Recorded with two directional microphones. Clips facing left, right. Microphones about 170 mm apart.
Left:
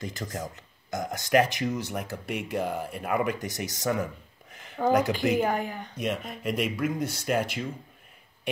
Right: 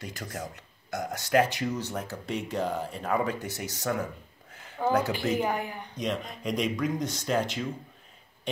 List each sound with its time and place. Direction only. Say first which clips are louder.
0.0 s speech: left 3 dB; 20° left (ahead or behind)
5.4 s speech: left 2 dB; 45° left (ahead or behind)
5.9 s speech: even; 5° left (ahead or behind)